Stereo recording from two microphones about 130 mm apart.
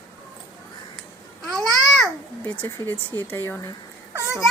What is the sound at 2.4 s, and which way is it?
Speech, 10° left (ahead or behind).